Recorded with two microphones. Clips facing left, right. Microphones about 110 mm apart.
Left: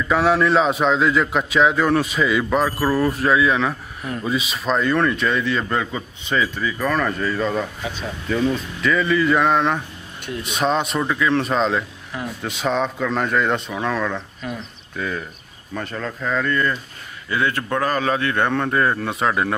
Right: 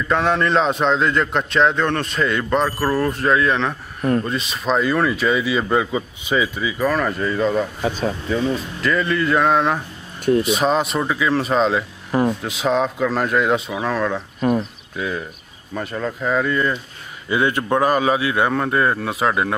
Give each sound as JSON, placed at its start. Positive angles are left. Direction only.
{"t": 0.1, "sound": "a man's voice", "side_deg": 5}
{"t": 12.1, "sound": "a sound", "side_deg": -50}
{"t": 12.4, "sound": "a man's voice", "side_deg": 0}
{"t": 14.4, "sound": "speech", "side_deg": -45}
{"t": 15.0, "sound": "a man's voice", "side_deg": -5}